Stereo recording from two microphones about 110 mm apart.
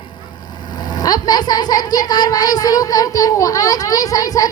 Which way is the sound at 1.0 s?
40° left (ahead or behind).